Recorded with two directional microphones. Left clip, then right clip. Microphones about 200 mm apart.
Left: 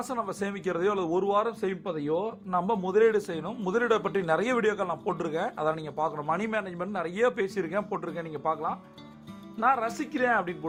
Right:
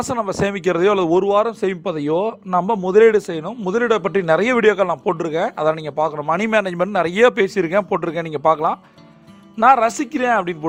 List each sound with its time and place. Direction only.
0.0 s speech: 45° right (ahead or behind)